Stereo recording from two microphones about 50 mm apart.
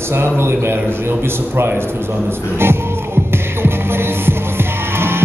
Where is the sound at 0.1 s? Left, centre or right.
Right.